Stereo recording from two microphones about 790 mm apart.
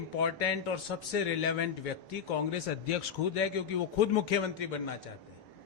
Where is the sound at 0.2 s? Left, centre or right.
Left.